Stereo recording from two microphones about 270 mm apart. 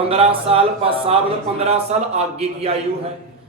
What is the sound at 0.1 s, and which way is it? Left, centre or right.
Speech, right.